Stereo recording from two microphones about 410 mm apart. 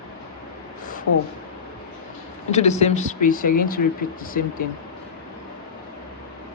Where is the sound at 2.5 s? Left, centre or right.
Centre.